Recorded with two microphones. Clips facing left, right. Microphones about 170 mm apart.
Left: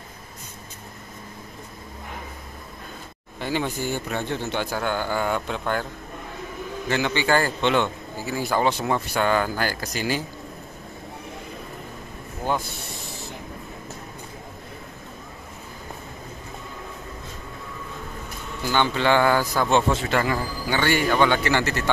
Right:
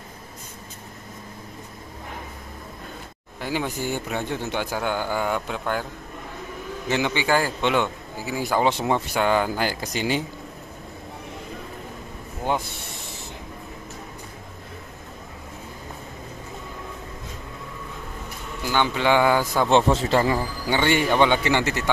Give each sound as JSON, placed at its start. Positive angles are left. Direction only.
{"t": 3.3, "sound": "a man's voice", "side_deg": -10}
{"t": 6.9, "sound": "a man's voice", "side_deg": -15}
{"t": 18.6, "sound": "a man's voice", "side_deg": -10}